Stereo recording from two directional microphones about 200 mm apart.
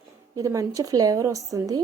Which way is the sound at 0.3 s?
15° right (ahead or behind).